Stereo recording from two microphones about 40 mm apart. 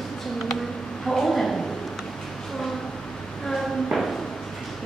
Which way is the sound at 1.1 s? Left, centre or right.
Centre.